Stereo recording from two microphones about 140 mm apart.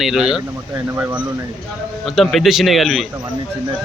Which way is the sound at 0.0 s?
Centre (ahead or behind).